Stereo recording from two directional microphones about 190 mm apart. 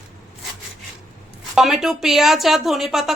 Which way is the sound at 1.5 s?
Centre (ahead or behind).